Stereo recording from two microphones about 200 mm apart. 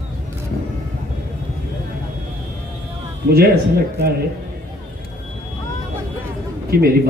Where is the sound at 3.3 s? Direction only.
50° right (ahead or behind).